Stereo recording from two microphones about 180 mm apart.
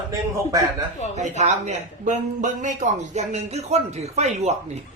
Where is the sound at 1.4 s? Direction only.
40° right (ahead or behind).